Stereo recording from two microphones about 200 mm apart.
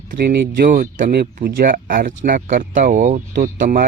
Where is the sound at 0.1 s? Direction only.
45° right (ahead or behind).